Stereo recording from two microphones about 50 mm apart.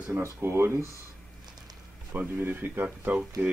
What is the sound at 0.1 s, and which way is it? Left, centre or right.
Speech, right.